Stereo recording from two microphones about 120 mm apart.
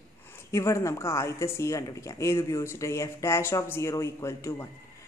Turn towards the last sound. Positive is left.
turn(degrees=25)  # may be behind; listen again after turning